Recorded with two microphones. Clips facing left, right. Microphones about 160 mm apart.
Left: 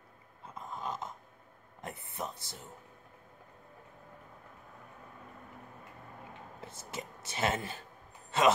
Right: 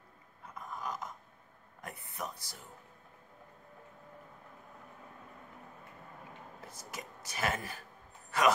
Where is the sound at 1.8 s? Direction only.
25° left (ahead or behind).